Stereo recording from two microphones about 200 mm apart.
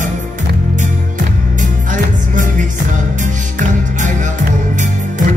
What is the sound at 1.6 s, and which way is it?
Music, 40° right (ahead or behind).